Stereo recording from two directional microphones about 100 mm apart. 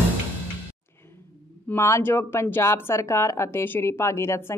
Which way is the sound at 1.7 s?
30° left (ahead or behind).